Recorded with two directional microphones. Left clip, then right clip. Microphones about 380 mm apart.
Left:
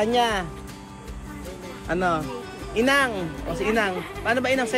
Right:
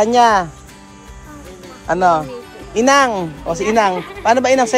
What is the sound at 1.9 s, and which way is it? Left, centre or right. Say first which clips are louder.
Speech: right 10 dB; centre.